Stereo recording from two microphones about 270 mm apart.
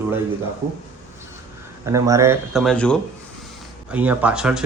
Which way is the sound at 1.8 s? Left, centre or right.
Centre.